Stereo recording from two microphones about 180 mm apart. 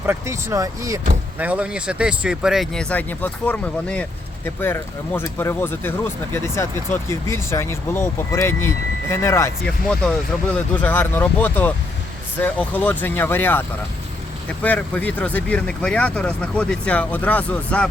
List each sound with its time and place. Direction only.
0.0 s speech: 15° right (ahead or behind); by 9.5 s 15° left (ahead or behind)
9.8 s speech: centre (ahead or behind)